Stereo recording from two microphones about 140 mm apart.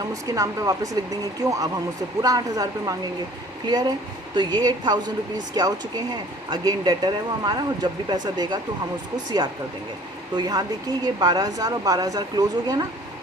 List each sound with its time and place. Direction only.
0.1 s speech: 25° right (ahead or behind)
10.3 s speech: 30° right (ahead or behind)